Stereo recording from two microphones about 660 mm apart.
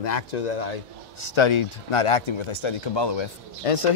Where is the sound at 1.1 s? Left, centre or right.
Left.